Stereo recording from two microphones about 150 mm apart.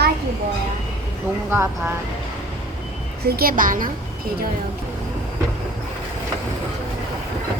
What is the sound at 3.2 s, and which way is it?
Speech, 80° right.